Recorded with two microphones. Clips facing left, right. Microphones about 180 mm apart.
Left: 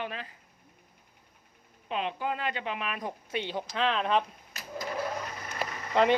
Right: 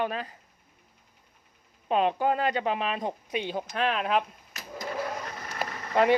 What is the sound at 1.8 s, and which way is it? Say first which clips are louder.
Speech: right 8 dB; 45° right (ahead or behind).